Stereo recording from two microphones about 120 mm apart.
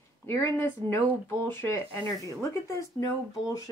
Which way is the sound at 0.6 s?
20° left (ahead or behind).